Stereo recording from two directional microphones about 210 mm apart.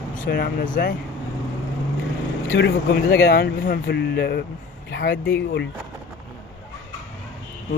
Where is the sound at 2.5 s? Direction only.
55° left (ahead or behind).